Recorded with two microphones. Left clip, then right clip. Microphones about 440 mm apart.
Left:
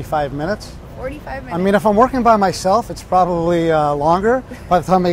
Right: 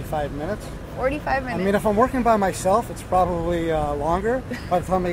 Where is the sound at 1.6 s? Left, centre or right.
Left.